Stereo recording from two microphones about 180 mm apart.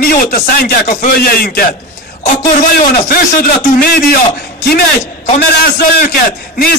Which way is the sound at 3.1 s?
55° left (ahead or behind).